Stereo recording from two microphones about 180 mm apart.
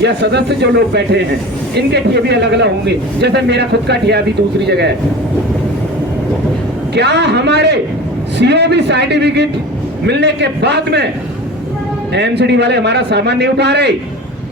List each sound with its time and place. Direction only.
0.0 s a man's voice: 70° right (ahead or behind)
6.9 s a man's voice: 70° right (ahead or behind)
12.1 s a man's voice: 70° right (ahead or behind)